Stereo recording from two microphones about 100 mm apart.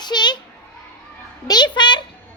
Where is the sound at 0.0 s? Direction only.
45° left (ahead or behind).